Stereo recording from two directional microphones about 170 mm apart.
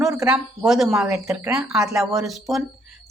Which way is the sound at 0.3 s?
5° right (ahead or behind).